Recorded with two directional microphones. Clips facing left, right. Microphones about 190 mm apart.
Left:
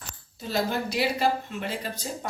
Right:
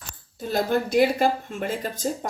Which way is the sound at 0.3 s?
50° right (ahead or behind).